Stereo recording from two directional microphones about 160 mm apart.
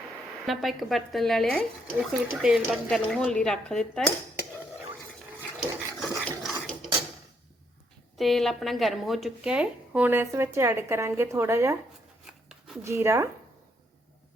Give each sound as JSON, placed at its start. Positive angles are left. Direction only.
{"t": 0.4, "sound": "speech", "side_deg": 0}
{"t": 6.0, "sound": "dog", "side_deg": 0}
{"t": 8.1, "sound": "speech", "side_deg": 0}
{"t": 12.2, "sound": "a sound", "side_deg": -5}
{"t": 12.8, "sound": "speech", "side_deg": -15}